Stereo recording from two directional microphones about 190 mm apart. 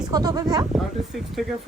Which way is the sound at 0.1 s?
20° right (ahead or behind).